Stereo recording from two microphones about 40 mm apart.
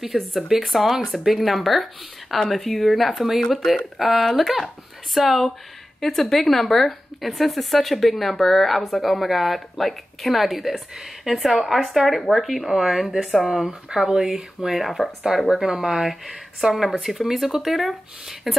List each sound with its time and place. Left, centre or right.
0.0 s speech: centre
5.9 s a woman's voice: centre
13.9 s speech: centre
15.3 s speech: centre
16.7 s speech: centre